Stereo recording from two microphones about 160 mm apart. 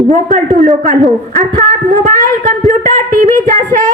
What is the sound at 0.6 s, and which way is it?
Speech, 45° right (ahead or behind).